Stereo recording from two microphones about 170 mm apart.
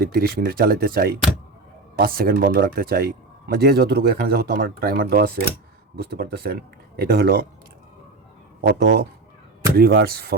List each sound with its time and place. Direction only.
0.0 s speech: 65° right (ahead or behind)
8.6 s speech: 75° right (ahead or behind)
9.7 s speech: 65° right (ahead or behind)